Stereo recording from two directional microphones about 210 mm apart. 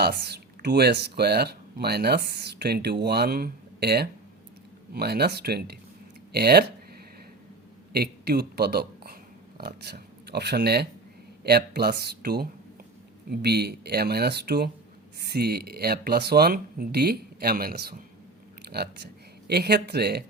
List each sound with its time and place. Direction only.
0.0 s speech: 50° right (ahead or behind)
7.9 s a man's voice: 50° right (ahead or behind)
19.5 s speech: 50° right (ahead or behind)